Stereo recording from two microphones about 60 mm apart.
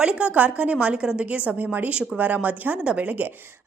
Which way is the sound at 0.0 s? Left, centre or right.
Centre.